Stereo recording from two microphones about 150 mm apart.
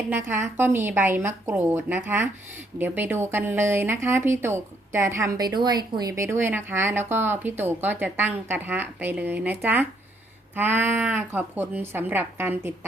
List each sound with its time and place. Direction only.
0.1 s a woman's voice: 15° right (ahead or behind)